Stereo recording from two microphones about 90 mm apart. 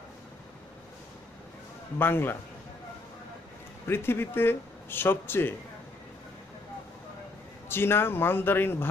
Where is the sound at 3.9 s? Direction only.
25° left (ahead or behind).